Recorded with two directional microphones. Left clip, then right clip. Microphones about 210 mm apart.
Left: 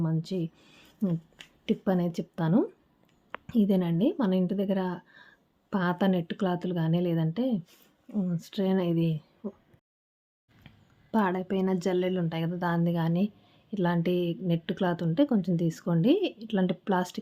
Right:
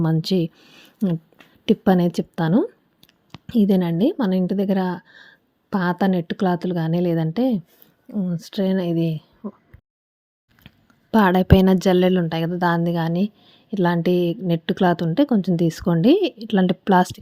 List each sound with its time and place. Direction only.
0.0 s speech: 45° right (ahead or behind)
0.5 s a woman's voice: 30° right (ahead or behind)
11.1 s a woman's voice: 35° right (ahead or behind)